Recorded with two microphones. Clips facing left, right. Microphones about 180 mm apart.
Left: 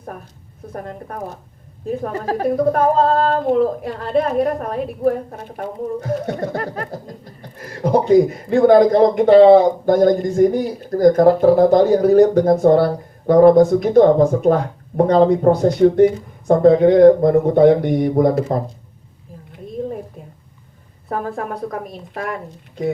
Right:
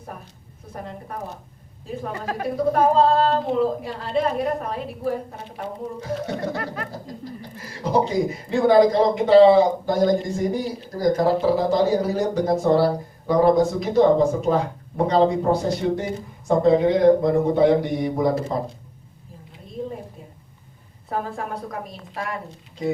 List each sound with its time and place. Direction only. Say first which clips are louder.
0.7 s speech: left 5 dB; 50° left (ahead or behind)
2.1 s a woman's voice: left 8 dB; 35° left (ahead or behind)
2.7 s speech: left 2 dB; 50° left (ahead or behind)
7.5 s speech: left 5 dB; 55° left (ahead or behind)
21.1 s speech: left 4 dB; 50° left (ahead or behind)